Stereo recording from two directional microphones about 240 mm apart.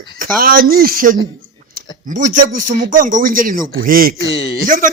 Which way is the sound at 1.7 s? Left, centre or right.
Right.